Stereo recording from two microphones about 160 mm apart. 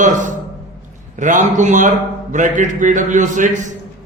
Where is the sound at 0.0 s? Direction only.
50° right (ahead or behind).